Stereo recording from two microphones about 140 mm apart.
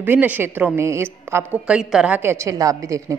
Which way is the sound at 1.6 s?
5° right (ahead or behind).